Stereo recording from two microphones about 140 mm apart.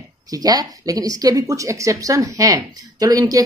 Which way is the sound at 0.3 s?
25° right (ahead or behind).